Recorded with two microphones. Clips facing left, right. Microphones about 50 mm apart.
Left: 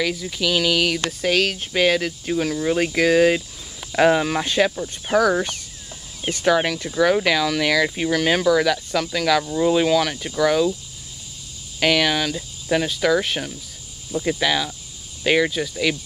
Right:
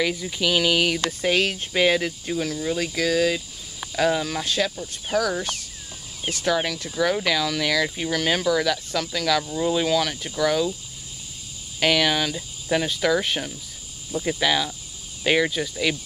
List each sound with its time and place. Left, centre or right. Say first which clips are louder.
0.0 s speech: left 1 dB; centre
1.7 s cricket: left 1 dB; centre
2.2 s speech: left 4 dB; centre
5.0 s speech: left 6 dB; centre
11.8 s cricket: left 2 dB; centre